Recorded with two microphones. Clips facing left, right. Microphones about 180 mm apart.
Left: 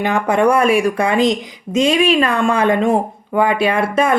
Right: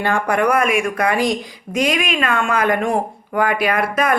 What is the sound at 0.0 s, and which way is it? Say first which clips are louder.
Speech: left 3 dB; 20° left (ahead or behind).